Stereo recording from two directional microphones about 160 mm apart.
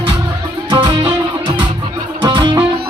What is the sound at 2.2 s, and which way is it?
Music, 30° right (ahead or behind).